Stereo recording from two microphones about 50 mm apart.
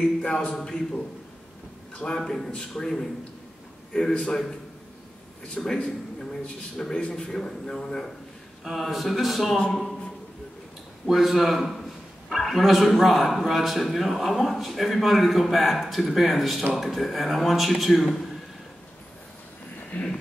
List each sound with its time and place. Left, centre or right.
0.0 s a man's voice: centre
2.1 s a man's voice: centre
5.6 s a man's voice: centre
6.8 s a man's voice: centre
7.2 s a man's voice: centre
8.6 s a man's voice: centre
11.1 s a man's voice: centre
19.9 s speech: left